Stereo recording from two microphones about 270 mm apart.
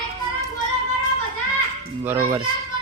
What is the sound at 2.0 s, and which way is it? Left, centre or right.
Speech, centre.